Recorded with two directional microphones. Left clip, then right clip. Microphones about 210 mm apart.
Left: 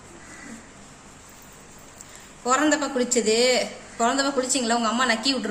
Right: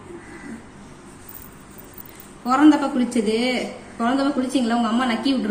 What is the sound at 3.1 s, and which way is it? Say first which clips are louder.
A woman's voice: left 2 dB; 55° left (ahead or behind).